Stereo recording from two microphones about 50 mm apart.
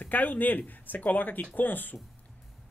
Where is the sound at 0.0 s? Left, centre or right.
Left.